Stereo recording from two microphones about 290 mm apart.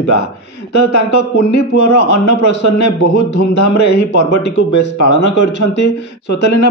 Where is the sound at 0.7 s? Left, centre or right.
Left.